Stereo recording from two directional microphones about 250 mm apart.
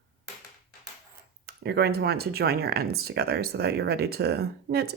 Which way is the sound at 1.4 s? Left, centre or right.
Right.